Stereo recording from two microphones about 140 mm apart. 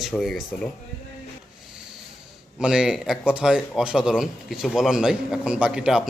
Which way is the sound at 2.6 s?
5° right (ahead or behind).